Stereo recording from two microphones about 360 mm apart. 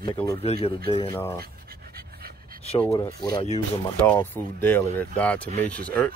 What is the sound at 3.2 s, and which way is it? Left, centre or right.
Speech, centre.